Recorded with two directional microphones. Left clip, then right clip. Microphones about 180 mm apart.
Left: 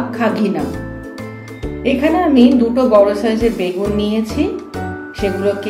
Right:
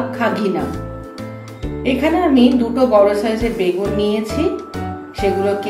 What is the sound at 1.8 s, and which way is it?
A woman's voice, 25° left (ahead or behind).